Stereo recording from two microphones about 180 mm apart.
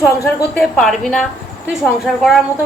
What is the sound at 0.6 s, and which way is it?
A woman's voice, centre (ahead or behind).